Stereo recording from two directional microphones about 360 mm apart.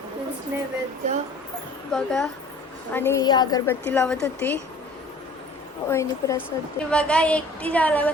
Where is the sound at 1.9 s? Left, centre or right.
Centre.